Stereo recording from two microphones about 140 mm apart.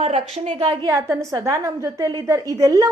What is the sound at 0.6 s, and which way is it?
Speech, 35° right (ahead or behind).